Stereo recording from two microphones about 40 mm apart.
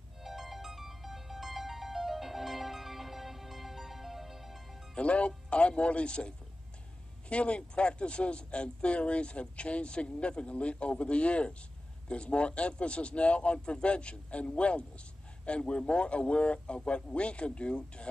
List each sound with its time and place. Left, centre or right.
0.2 s music: centre
4.9 s a man's voice: left